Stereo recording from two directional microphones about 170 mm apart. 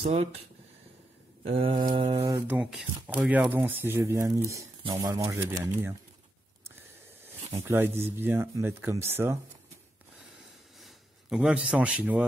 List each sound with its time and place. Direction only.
0.0 s mantra: 35° right (ahead or behind)
1.4 s mantra: 35° right (ahead or behind)
2.1 s speech: 20° right (ahead or behind)
2.4 s speech: 5° right (ahead or behind)
7.6 s speech: 15° right (ahead or behind)
10.8 s a man's voice: 5° right (ahead or behind)